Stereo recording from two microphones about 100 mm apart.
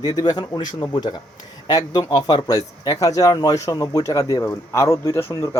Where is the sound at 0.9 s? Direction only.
50° left (ahead or behind).